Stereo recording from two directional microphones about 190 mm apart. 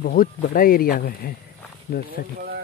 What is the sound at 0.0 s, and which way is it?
Speech, 50° left (ahead or behind).